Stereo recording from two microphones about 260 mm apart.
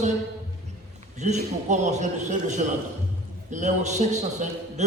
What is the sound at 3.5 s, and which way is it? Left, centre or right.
Speech, right.